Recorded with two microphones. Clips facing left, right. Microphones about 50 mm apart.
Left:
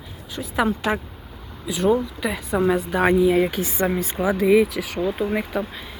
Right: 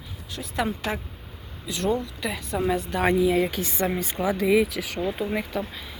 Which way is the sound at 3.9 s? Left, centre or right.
Centre.